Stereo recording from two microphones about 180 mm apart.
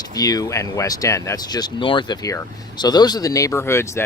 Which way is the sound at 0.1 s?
20° left (ahead or behind).